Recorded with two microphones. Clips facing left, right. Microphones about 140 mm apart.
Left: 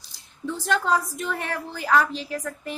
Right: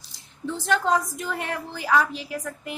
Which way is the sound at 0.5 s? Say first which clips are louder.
Right 1 dB; 25° right (ahead or behind).